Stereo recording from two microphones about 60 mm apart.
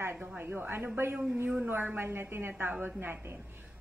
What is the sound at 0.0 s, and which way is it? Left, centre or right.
A woman's voice, right.